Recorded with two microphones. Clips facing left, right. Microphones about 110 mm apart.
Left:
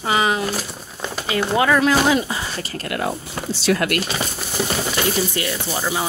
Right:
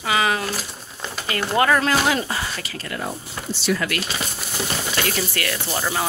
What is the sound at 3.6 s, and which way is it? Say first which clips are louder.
Speech: left 4 dB; 60° left (ahead or behind).